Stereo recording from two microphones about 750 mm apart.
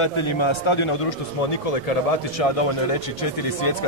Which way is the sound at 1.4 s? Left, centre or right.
Left.